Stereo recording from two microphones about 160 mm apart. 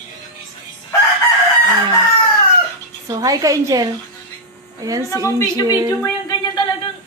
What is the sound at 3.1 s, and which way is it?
Speech, 25° right (ahead or behind).